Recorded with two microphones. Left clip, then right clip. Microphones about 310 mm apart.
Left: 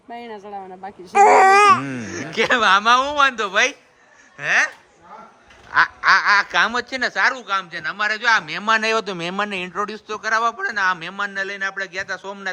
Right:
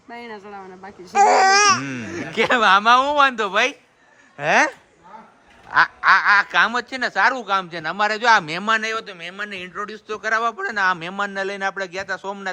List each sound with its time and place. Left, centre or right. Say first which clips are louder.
0.1 s speech: left 2 dB; centre
0.3 s speech: left 3 dB; right
1.1 s speech: left 3 dB; left
1.8 s speech: even; centre
5.7 s speech: even; centre